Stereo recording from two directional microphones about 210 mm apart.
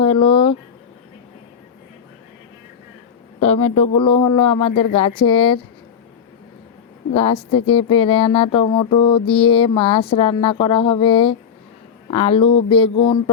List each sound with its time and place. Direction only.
0.0 s a sound: 25° left (ahead or behind)
3.4 s mantra: 30° left (ahead or behind)
7.1 s mantra: 25° left (ahead or behind)